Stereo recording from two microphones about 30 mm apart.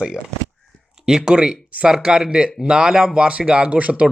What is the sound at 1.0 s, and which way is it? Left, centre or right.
Speech, right.